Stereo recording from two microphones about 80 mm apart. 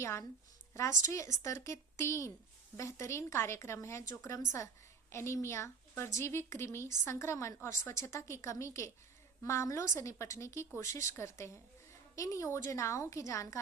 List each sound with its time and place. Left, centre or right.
0.0 s a woman's voice: left
5.1 s a woman's voice: left